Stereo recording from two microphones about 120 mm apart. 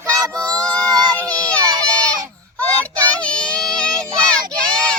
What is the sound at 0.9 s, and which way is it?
Child singing, 35° right (ahead or behind).